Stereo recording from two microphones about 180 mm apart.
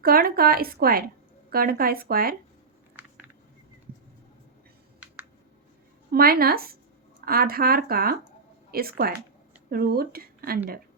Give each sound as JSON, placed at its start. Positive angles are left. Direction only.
{"t": 0.0, "sound": "a woman's voice", "side_deg": -55}
{"t": 3.0, "sound": "a sound", "side_deg": -10}
{"t": 6.1, "sound": "a woman's voice", "side_deg": -55}